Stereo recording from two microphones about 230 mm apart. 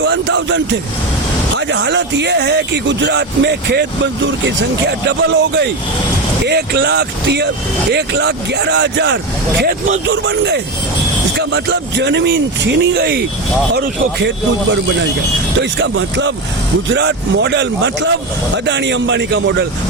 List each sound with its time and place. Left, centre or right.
0.0 s speech: right
15.8 s speech: right